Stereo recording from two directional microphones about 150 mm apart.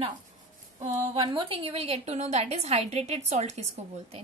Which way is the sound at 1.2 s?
35° right (ahead or behind).